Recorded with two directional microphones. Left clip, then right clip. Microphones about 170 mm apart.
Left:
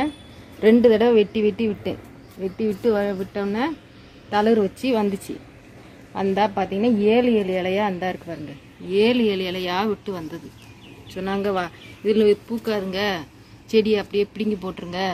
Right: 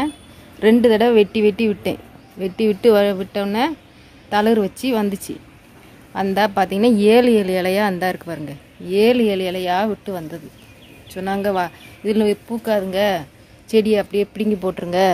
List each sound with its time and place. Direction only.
0.6 s speech: 50° right (ahead or behind)
2.4 s a woman's voice: 85° right
4.3 s speech: 60° right (ahead or behind)
6.1 s a woman's voice: 70° right (ahead or behind); by 8.4 s 85° right
8.9 s speech: 55° right (ahead or behind)